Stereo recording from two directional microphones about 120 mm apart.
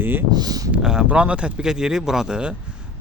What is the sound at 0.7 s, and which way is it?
Speech, 5° right (ahead or behind).